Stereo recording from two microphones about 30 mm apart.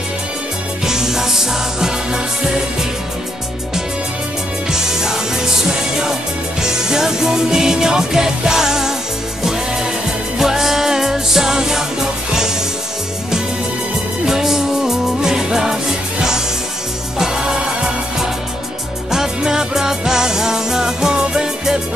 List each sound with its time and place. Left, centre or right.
0.8 s music: centre
4.6 s music: centre
10.4 s music: centre
14.2 s music: centre
19.0 s music: centre